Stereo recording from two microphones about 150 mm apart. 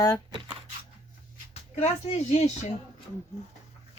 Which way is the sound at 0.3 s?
30° right (ahead or behind).